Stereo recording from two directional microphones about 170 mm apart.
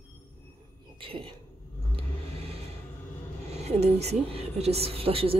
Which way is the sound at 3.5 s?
40° right (ahead or behind).